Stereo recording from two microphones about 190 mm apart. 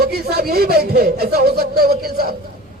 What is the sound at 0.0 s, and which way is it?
A man's voice, 55° right (ahead or behind).